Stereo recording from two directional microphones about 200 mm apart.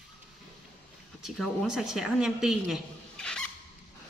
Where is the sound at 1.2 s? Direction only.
Centre (ahead or behind).